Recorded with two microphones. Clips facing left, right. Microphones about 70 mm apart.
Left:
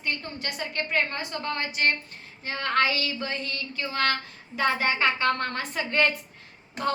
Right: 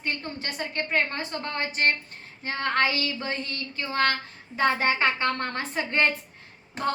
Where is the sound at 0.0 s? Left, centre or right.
Right.